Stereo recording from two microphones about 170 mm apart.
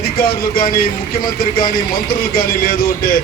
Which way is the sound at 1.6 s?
60° left (ahead or behind).